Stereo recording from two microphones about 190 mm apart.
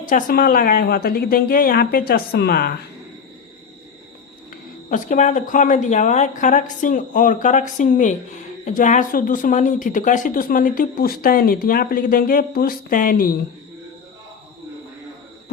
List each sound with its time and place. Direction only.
0.0 s a woman's voice: 45° left (ahead or behind)
4.9 s a woman's voice: 40° left (ahead or behind)